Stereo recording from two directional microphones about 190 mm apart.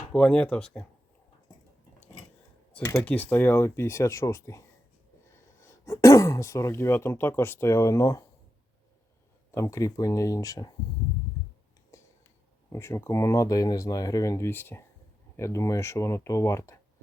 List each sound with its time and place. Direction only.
0.1 s speech: 5° left (ahead or behind)
2.7 s speech: 15° left (ahead or behind)
9.5 s speech: 15° left (ahead or behind)
11.9 s a sound: 15° left (ahead or behind)
12.7 s speech: 15° left (ahead or behind)